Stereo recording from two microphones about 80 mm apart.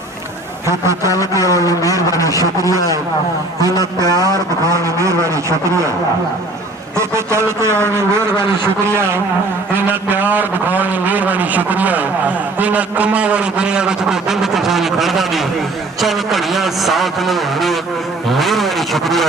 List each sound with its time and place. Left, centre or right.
0.7 s a man's voice: right
1.5 s a sound: left
4.6 s a man's voice: right
6.9 s a man's voice: right; by 19.2 s centre